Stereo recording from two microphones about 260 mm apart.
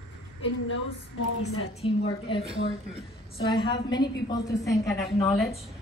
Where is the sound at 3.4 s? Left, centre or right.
Centre.